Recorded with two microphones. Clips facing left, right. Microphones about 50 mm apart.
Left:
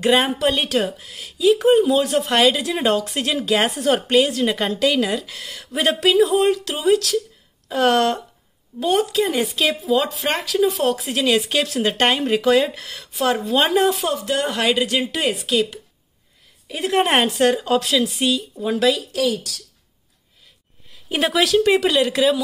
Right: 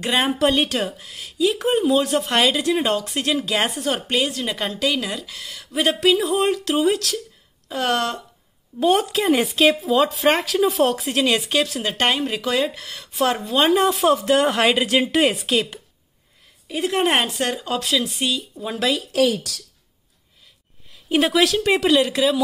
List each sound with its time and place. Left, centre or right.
0.0 s a woman's voice: centre
6.1 s a woman's voice: centre
8.7 s a woman's voice: centre
12.1 s speech: centre
14.0 s a woman's voice: right
16.7 s a woman's voice: centre
19.1 s speech: right
21.1 s speech: centre